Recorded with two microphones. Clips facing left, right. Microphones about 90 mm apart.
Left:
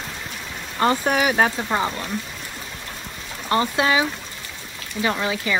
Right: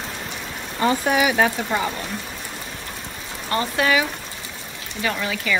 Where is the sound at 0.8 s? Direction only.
45° left (ahead or behind).